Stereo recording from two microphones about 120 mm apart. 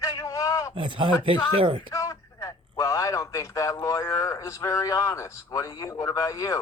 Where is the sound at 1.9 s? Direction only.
25° left (ahead or behind).